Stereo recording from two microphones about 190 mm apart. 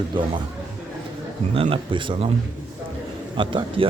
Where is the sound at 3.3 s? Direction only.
25° right (ahead or behind).